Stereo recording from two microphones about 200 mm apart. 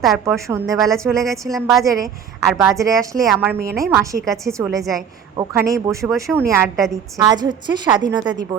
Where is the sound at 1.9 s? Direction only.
15° right (ahead or behind).